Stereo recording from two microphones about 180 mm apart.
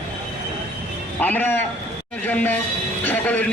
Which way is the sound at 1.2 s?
10° left (ahead or behind).